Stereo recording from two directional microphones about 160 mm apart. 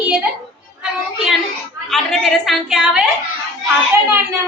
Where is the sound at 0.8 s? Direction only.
5° right (ahead or behind).